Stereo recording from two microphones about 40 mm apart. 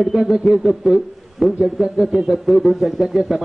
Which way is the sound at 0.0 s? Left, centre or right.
Centre.